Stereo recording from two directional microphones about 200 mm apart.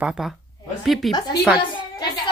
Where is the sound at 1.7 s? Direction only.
20° left (ahead or behind).